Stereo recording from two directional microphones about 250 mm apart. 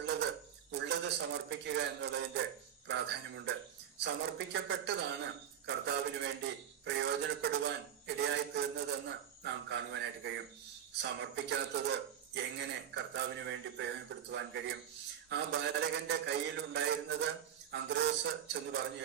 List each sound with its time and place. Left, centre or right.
0.7 s a man's voice: right